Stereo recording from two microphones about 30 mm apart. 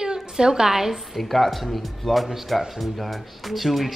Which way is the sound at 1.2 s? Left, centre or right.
Centre.